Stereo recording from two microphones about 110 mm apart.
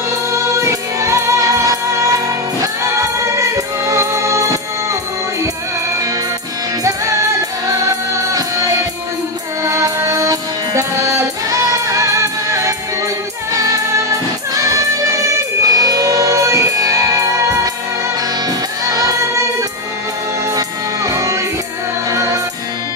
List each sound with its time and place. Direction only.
0.6 s music: 25° right (ahead or behind)
7.6 s music: 30° right (ahead or behind)
18.9 s music: 30° right (ahead or behind)
20.5 s music: 30° right (ahead or behind)